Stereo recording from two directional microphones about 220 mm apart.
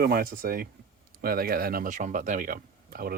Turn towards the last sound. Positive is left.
turn(degrees=-40)  # may be behind; listen again after turning